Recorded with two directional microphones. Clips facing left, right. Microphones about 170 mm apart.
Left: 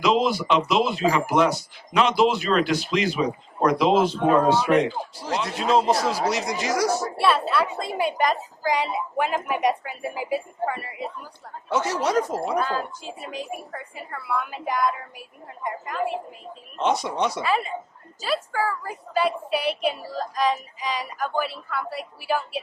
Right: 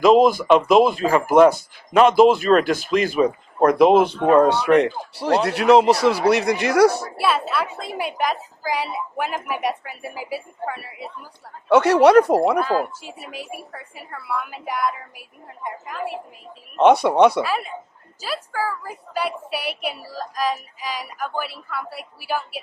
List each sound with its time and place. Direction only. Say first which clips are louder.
0.0 s speech: right 7 dB; 50° right (ahead or behind)
7.2 s speech: even; centre (ahead or behind)
11.7 s speech: right 11 dB; 65° right (ahead or behind)
12.5 s speech: right 5 dB; 5° right (ahead or behind)
16.7 s speech: right 10 dB; 60° right (ahead or behind)
17.4 s speech: left 1 dB; 5° right (ahead or behind)